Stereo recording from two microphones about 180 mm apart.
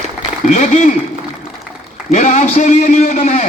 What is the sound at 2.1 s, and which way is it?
Speech, 40° left (ahead or behind).